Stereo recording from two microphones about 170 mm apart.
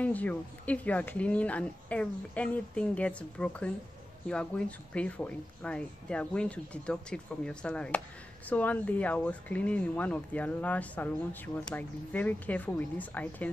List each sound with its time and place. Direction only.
0.0 s speech: 10° left (ahead or behind)